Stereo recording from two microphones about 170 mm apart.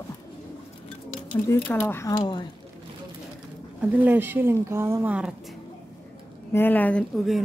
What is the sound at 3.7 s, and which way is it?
Speech, 10° right (ahead or behind).